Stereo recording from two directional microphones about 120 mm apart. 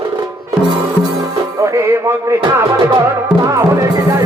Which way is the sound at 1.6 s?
20° right (ahead or behind).